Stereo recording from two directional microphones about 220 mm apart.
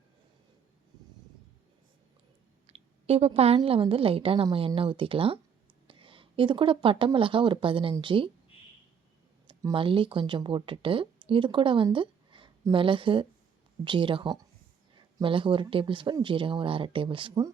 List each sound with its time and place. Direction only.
2.6 s a woman's voice: 30° right (ahead or behind)
9.5 s a woman's voice: 20° right (ahead or behind)